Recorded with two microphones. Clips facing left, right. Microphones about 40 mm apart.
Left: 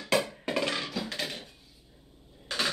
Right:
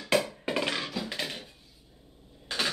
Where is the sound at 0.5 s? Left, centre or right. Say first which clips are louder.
Right 1 dB; centre.